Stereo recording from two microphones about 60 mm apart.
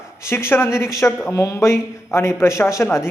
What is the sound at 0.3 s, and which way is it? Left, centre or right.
Speech, left.